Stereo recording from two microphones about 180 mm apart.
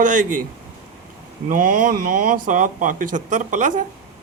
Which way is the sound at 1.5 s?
50° right (ahead or behind).